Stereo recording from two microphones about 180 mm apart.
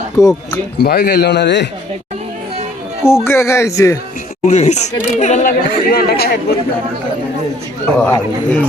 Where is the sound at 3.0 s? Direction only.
15° left (ahead or behind).